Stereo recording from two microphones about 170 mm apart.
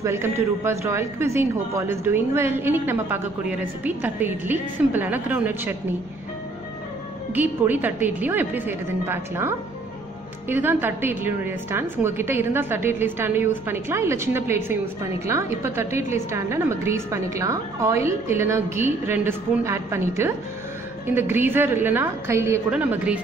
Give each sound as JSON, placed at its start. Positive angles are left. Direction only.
{"t": 0.0, "sound": "a man's voice", "side_deg": -15}
{"t": 7.3, "sound": "a man's voice", "side_deg": -10}